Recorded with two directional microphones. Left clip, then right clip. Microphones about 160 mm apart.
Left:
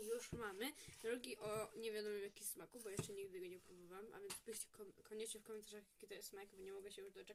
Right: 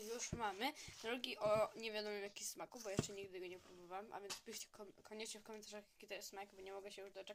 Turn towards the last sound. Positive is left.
turn(degrees=15)  # may be behind; listen again after turning